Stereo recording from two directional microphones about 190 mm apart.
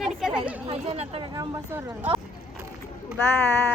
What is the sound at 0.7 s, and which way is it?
Speech, 35° right (ahead or behind).